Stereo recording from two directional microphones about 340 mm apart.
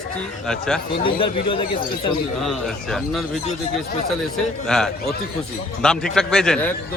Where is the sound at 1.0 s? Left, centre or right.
Centre.